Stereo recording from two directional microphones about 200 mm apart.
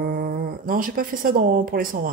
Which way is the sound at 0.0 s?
50° right (ahead or behind).